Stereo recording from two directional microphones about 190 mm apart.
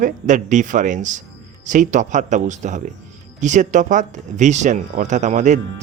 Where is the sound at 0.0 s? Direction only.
40° right (ahead or behind).